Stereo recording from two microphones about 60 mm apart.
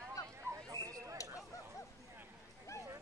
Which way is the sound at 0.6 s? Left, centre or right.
Right.